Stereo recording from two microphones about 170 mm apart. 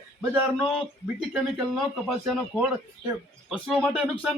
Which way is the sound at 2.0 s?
Centre (ahead or behind).